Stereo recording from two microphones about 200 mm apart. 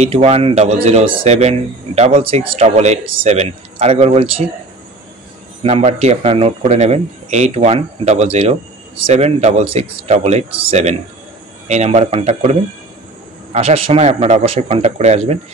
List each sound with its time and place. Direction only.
0.0 s speech: 30° right (ahead or behind)
5.6 s speech: 30° right (ahead or behind)